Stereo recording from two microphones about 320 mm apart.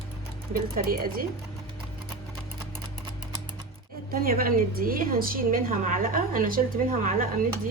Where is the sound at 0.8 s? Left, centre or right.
Right.